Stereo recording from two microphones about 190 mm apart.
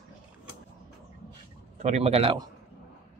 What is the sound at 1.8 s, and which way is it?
Speech, 35° right (ahead or behind).